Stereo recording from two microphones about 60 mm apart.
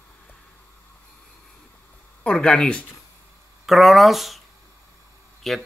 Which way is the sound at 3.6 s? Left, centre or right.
Centre.